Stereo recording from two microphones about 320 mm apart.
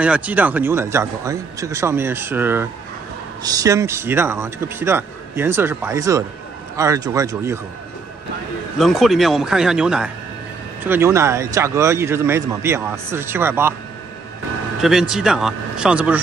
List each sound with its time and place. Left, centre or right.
0.0 s speech: centre
8.7 s a man's voice: centre
14.8 s a man's voice: centre